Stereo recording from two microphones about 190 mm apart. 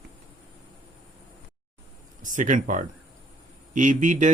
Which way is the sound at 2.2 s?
40° right (ahead or behind).